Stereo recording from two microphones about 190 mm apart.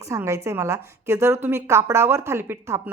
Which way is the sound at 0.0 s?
15° right (ahead or behind).